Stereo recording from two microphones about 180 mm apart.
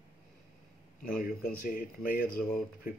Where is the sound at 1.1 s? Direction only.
50° left (ahead or behind).